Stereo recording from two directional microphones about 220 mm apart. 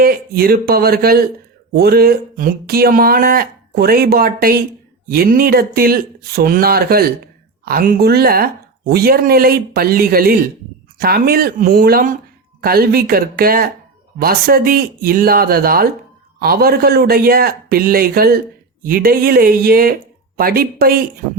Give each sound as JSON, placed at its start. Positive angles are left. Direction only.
{"t": 0.0, "sound": "speech", "side_deg": -45}